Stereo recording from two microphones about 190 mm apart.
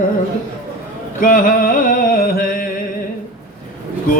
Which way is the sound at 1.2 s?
45° left (ahead or behind).